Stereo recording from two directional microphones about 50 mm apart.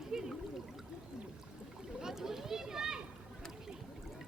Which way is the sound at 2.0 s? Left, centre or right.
Centre.